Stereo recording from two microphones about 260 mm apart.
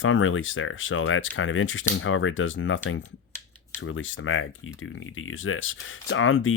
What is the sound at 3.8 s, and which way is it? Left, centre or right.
Speech, left.